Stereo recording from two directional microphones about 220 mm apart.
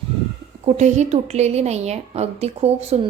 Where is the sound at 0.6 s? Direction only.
30° right (ahead or behind).